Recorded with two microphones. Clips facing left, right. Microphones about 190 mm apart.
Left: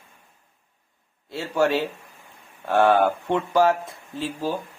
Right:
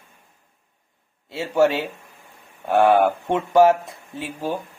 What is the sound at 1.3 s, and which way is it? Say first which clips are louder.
Speech: right 3 dB; 15° right (ahead or behind).